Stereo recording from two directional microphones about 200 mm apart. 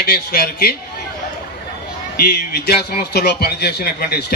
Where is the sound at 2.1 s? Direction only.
50° left (ahead or behind).